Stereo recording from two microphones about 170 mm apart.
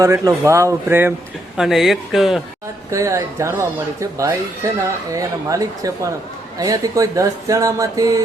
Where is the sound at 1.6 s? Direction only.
Centre (ahead or behind).